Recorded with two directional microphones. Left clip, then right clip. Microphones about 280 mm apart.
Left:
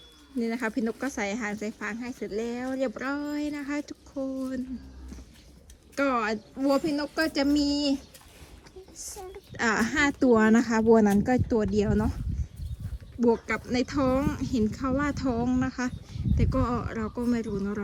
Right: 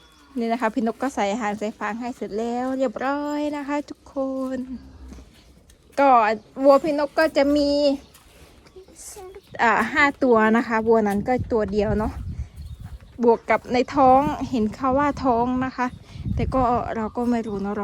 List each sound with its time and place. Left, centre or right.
0.3 s speech: centre
0.8 s speech: right
1.2 s speech: centre
2.2 s speech: right
3.0 s speech: centre
4.1 s speech: right
5.9 s speech: centre
9.6 s speech: centre